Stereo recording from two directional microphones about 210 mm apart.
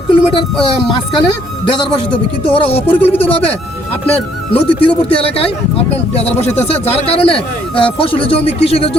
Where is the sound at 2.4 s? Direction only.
25° left (ahead or behind).